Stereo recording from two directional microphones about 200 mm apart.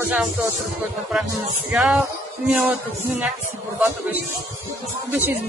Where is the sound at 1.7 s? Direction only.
Centre (ahead or behind).